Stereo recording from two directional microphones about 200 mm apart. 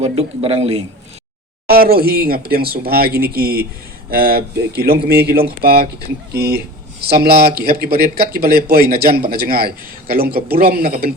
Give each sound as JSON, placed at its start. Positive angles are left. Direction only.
{"t": 0.0, "sound": "a man's voice", "side_deg": -30}
{"t": 1.6, "sound": "speech", "side_deg": -50}